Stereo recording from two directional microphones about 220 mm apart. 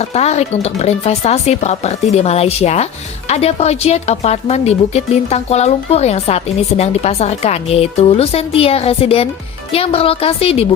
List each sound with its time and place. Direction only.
0.0 s speech: 30° left (ahead or behind)